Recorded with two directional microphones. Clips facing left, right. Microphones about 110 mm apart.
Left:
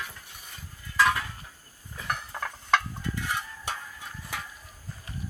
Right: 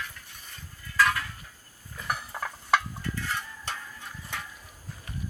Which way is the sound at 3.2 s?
15° left (ahead or behind).